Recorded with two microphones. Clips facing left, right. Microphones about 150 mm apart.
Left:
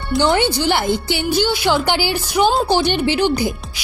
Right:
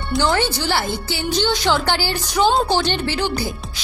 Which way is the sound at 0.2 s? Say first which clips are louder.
Left 4 dB; 20° left (ahead or behind).